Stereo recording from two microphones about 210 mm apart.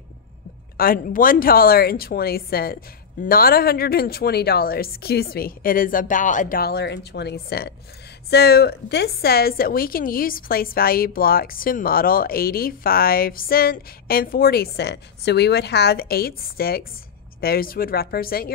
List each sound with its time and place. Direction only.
0.7 s a woman's voice: 45° left (ahead or behind)